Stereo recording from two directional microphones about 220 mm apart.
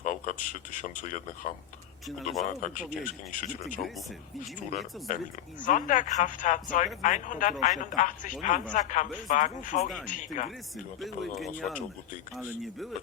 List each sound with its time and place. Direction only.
0.0 s speech: 35° left (ahead or behind)
2.0 s speech: centre (ahead or behind)
2.5 s speech: 35° left (ahead or behind)
5.1 s speech: 35° left (ahead or behind)
11.0 s speech: centre (ahead or behind)